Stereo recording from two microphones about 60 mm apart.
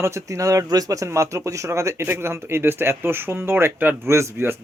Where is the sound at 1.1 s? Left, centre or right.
Right.